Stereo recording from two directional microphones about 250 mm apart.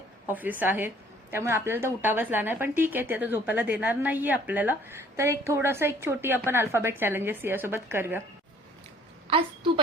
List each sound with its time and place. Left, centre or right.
0.3 s a woman's voice: centre
9.2 s a woman's voice: right